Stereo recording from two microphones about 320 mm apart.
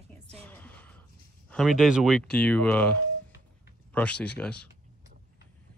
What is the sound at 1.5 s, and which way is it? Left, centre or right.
Speech, centre.